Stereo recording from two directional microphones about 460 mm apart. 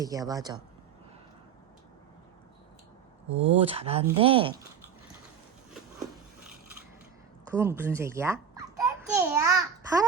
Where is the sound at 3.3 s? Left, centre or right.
Right.